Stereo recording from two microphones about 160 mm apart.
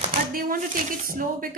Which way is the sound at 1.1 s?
60° right (ahead or behind).